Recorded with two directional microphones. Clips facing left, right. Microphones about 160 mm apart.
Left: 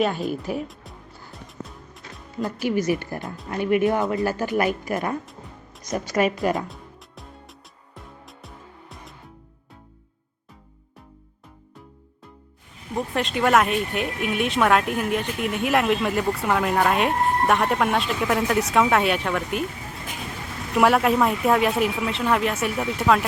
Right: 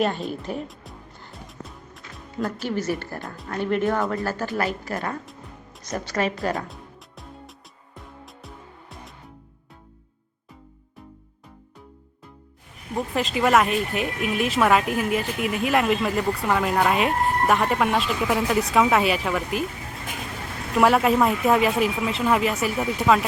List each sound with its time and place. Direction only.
0.0 s music: centre (ahead or behind)
2.6 s speech: 15° left (ahead or behind)
3.2 s speech: centre (ahead or behind)
3.5 s speech: 10° left (ahead or behind)
5.2 s music: centre (ahead or behind)
5.8 s speech: 10° left (ahead or behind)
7.9 s music: centre (ahead or behind)
13.0 s speech: centre (ahead or behind)
20.7 s speech: centre (ahead or behind)